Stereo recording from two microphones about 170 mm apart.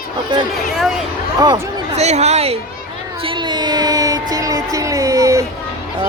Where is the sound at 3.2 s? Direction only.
30° right (ahead or behind).